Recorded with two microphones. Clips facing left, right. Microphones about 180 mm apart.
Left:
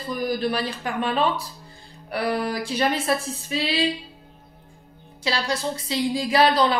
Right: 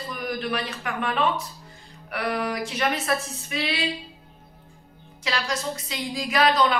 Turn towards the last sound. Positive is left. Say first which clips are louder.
# left 2 dB
turn(degrees=30)  # may be behind; listen again after turning